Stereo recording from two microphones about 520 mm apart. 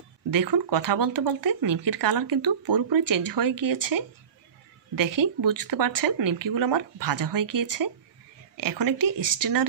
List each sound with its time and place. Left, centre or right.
0.3 s speech: right